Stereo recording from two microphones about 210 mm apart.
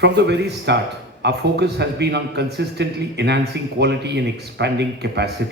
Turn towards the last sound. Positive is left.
turn(degrees=-55)  # may be behind; listen again after turning